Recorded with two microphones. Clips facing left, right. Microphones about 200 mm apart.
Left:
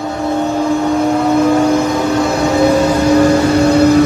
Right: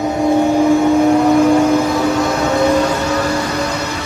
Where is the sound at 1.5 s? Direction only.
10° left (ahead or behind).